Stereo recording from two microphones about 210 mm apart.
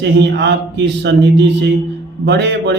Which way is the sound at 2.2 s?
55° right (ahead or behind).